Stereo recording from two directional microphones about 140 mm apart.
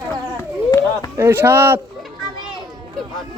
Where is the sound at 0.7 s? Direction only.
25° left (ahead or behind).